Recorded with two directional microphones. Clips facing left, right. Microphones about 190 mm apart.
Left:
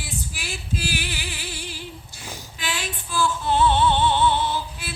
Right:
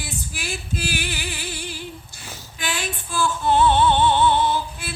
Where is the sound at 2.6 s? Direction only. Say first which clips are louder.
Right 3 dB; 50° right (ahead or behind).